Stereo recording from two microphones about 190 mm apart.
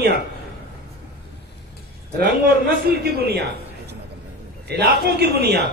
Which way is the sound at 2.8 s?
55° right (ahead or behind).